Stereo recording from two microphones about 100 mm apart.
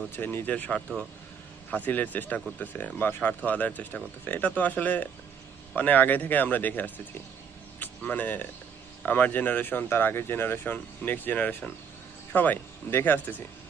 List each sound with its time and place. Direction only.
0.0 s speech: 20° left (ahead or behind)